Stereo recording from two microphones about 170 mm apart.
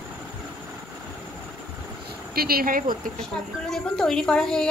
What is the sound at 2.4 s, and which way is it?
Speech, 60° right (ahead or behind).